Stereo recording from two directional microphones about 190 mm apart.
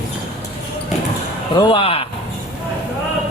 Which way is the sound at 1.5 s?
25° left (ahead or behind).